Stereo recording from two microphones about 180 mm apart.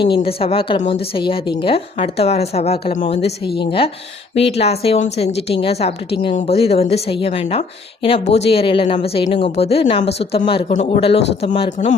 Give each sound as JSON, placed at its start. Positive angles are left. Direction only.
{"t": 0.0, "sound": "speech", "side_deg": 30}